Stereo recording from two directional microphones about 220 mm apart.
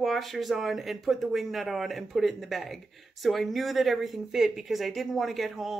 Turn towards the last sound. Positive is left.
turn(degrees=0)  # may be behind; listen again after turning